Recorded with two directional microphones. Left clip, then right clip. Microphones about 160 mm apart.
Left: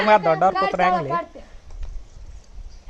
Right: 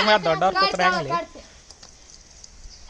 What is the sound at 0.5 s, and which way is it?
Speech, 5° left (ahead or behind).